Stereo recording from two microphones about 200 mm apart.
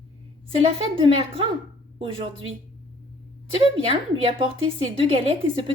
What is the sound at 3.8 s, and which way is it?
A woman's voice, 30° right (ahead or behind).